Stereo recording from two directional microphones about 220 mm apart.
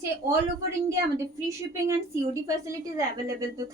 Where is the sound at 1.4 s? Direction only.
15° right (ahead or behind).